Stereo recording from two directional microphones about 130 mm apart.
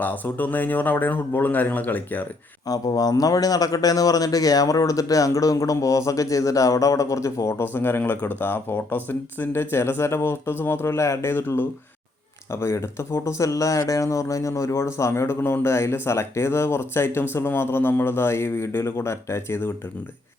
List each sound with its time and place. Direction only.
0.0 s speech: 15° left (ahead or behind)
2.6 s a man's voice: 30° left (ahead or behind)